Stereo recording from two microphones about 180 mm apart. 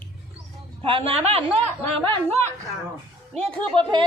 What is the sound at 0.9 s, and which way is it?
Speech, 30° right (ahead or behind).